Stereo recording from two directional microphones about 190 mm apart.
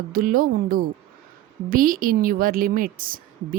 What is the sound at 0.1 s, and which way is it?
A woman's voice, 50° right (ahead or behind).